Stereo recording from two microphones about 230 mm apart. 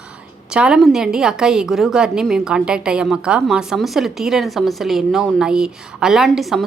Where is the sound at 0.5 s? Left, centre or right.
Centre.